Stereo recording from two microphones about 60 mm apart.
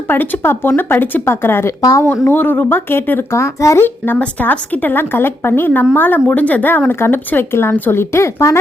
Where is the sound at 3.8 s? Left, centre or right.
Left.